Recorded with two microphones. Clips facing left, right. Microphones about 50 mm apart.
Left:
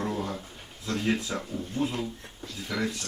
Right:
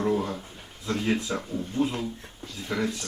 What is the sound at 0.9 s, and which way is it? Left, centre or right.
Speech, centre.